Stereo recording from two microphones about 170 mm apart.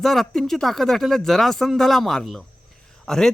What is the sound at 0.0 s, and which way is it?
Speech, centre (ahead or behind).